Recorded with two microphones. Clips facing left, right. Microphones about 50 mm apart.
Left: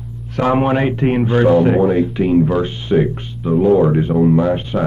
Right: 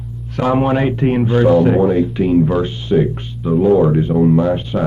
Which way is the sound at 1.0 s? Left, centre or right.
Centre.